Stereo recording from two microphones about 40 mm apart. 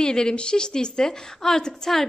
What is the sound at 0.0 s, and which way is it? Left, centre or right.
A woman's voice, centre.